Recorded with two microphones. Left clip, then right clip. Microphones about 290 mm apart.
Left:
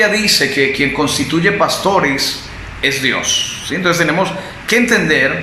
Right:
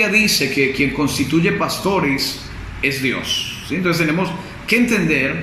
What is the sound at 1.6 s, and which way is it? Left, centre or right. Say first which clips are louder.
Speech: left 5 dB; centre.